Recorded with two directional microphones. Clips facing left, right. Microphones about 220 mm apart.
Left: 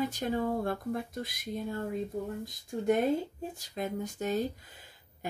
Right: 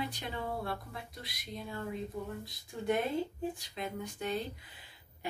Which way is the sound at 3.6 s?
45° left (ahead or behind).